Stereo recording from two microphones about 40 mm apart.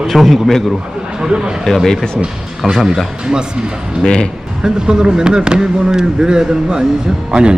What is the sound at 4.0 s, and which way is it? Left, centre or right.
Speech, left.